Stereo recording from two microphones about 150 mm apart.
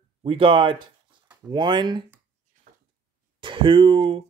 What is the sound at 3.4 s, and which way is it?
Speech, 35° right (ahead or behind).